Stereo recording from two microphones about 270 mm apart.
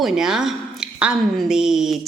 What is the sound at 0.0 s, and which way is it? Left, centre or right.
A woman's voice, centre.